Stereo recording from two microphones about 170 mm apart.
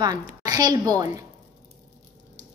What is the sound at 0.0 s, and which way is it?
A woman's voice, 25° right (ahead or behind).